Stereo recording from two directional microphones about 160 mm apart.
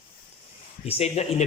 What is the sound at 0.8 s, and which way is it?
Speech, 40° left (ahead or behind).